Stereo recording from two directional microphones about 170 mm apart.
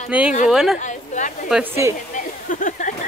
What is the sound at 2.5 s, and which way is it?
Speech, 50° left (ahead or behind).